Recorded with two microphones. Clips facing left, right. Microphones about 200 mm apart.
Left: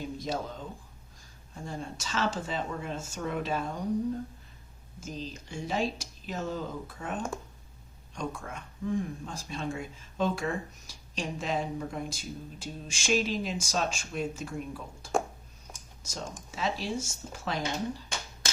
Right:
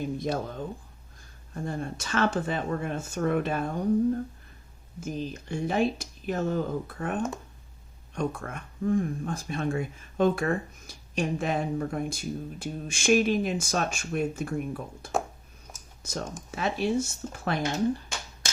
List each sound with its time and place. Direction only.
0.2 s speech: 55° right (ahead or behind)
4.9 s speech: 55° right (ahead or behind)